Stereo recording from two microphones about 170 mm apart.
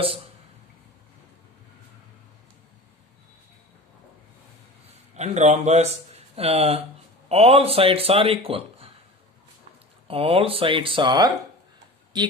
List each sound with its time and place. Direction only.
5.1 s speech: 40° right (ahead or behind)
10.1 s speech: 35° right (ahead or behind)